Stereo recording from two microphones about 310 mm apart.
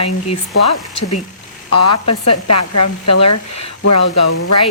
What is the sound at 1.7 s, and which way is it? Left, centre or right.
Speech, left.